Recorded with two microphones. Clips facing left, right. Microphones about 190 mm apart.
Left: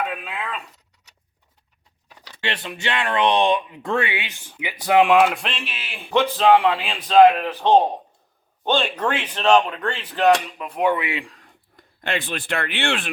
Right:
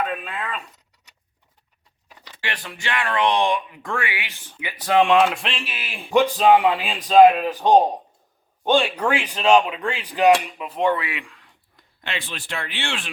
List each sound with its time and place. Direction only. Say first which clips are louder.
0.0 s speech: right 1 dB; centre (ahead or behind)
2.4 s speech: left 4 dB; 25° left (ahead or behind); by 10.9 s centre (ahead or behind)
10.9 s speech: left 2 dB; 25° left (ahead or behind); by 13.1 s 60° left (ahead or behind)